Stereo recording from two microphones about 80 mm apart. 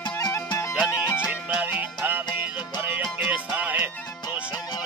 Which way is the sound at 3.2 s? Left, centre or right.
Centre.